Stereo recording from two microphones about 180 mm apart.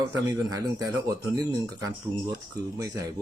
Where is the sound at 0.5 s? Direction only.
20° right (ahead or behind).